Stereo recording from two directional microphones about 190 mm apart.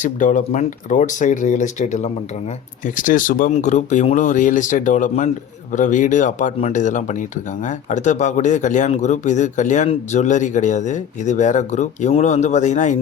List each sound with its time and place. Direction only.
0.0 s speech: 40° left (ahead or behind)